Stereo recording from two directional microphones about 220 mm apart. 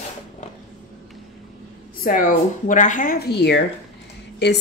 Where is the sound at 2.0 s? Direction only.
40° left (ahead or behind).